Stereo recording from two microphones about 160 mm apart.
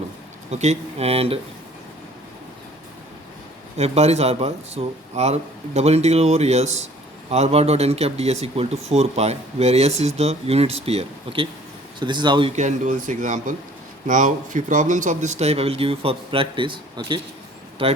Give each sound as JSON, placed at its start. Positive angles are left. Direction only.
{"t": 0.5, "sound": "speech", "side_deg": -45}
{"t": 3.8, "sound": "speech", "side_deg": -40}
{"t": 12.5, "sound": "speech", "side_deg": -50}